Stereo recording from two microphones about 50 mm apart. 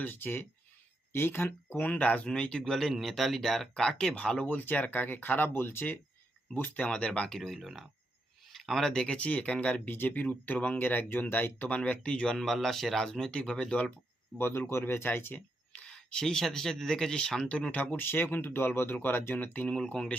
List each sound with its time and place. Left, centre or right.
0.0 s speech: left
2.3 s speech: centre
4.4 s speech: left
6.8 s speech: centre
7.4 s speech: centre
8.5 s a sound: centre
8.9 s speech: centre; by 11.7 s left
11.7 s speech: left
12.5 s speech: centre; by 13.9 s left
14.3 s speech: left
15.7 s speech: centre
17.7 s speech: left
19.6 s speech: centre